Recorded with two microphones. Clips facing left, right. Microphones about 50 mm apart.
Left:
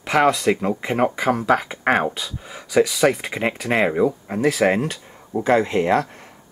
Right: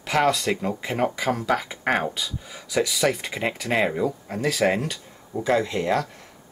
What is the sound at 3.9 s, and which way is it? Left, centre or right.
Speech, left.